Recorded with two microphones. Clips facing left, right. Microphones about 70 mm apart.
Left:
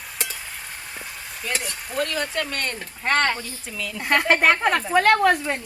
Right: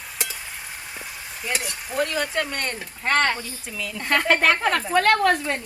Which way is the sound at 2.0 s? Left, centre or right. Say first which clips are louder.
Right 1 dB; centre.